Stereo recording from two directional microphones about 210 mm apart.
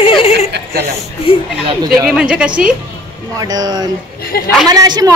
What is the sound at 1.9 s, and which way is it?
Speech, centre (ahead or behind).